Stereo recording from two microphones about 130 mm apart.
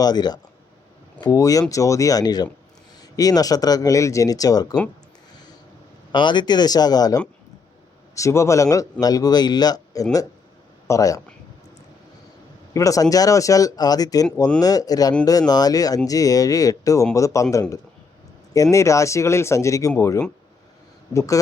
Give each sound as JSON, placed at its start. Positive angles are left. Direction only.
{"t": 0.0, "sound": "a man's voice", "side_deg": 30}
{"t": 6.1, "sound": "a man's voice", "side_deg": 35}
{"t": 12.7, "sound": "a man's voice", "side_deg": 25}